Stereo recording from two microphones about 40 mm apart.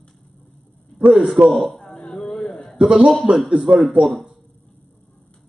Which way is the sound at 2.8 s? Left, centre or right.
Right.